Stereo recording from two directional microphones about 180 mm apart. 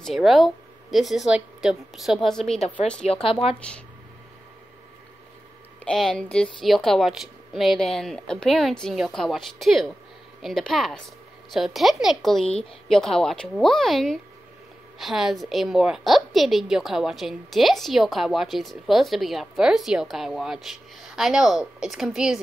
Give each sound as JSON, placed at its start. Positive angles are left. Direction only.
{"t": 0.0, "sound": "a woman's voice", "side_deg": 0}
{"t": 3.1, "sound": "speech", "side_deg": 30}
{"t": 3.5, "sound": "speech", "side_deg": 5}
{"t": 5.9, "sound": "a woman's voice", "side_deg": 5}